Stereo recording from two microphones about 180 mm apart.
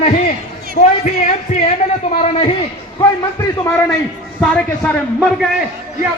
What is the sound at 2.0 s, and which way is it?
Speech, 35° left (ahead or behind).